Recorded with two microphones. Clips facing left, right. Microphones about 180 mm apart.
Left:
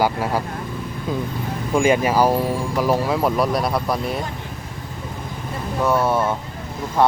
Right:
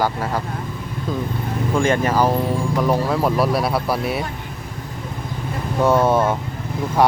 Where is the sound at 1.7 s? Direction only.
10° left (ahead or behind); by 4.2 s 5° right (ahead or behind).